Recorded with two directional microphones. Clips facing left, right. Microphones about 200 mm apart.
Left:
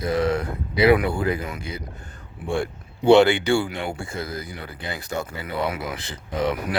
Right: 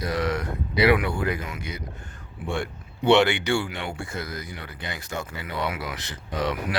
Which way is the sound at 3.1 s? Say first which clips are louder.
Left 4 dB; 30° left (ahead or behind).